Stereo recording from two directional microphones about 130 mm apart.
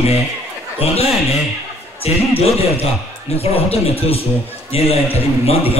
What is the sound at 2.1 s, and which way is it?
Speech, 55° left (ahead or behind).